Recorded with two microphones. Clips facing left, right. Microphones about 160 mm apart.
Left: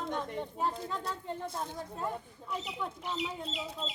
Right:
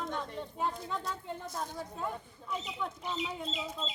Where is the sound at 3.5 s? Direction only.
70° left (ahead or behind).